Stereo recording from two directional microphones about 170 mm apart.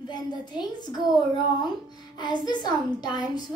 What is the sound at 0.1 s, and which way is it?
Speech, 25° left (ahead or behind).